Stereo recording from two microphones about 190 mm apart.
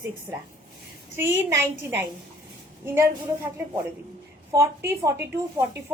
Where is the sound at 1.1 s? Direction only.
10° right (ahead or behind).